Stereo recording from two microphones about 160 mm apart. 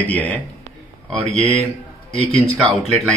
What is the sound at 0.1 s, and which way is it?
Speech, 10° left (ahead or behind).